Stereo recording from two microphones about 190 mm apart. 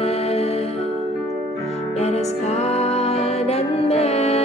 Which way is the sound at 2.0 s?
35° left (ahead or behind).